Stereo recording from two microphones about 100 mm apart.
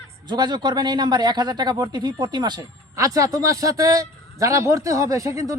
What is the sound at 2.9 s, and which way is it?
A man's voice, 30° right (ahead or behind).